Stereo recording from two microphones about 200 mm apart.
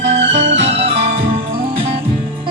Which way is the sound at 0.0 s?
35° right (ahead or behind).